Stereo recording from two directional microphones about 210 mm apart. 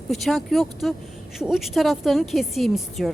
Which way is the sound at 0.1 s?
Centre (ahead or behind).